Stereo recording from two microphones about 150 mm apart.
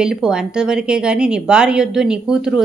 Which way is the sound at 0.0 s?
5° right (ahead or behind).